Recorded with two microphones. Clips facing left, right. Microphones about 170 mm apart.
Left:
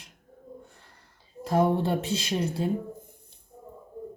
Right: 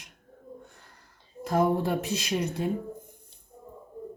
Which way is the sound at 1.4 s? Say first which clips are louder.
Left 1 dB; 30° left (ahead or behind).